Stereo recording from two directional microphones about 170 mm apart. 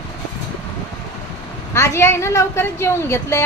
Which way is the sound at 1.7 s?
15° left (ahead or behind).